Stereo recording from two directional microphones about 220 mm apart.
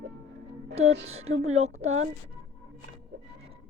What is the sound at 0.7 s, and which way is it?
Speech, 30° right (ahead or behind).